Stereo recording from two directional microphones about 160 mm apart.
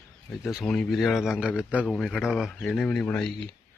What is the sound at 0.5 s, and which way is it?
A man's voice, 5° left (ahead or behind).